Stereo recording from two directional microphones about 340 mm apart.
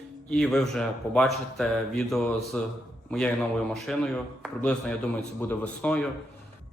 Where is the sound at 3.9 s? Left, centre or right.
Centre.